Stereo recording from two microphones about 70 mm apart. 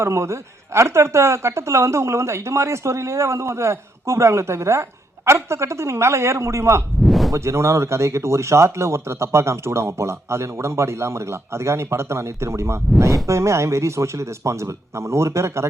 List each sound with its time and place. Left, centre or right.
0.0 s speech: right
7.0 s a sound: centre
7.3 s speech: right